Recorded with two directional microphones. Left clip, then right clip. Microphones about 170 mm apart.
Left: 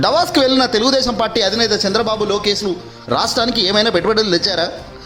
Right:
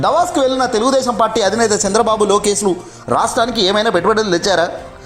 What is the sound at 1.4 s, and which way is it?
Speech, 5° left (ahead or behind).